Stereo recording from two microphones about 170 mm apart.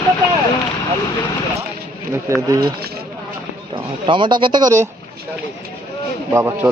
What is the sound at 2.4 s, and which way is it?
Speech, 20° right (ahead or behind).